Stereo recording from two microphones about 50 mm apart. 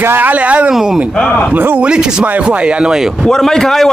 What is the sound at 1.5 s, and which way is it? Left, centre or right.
Speech, right.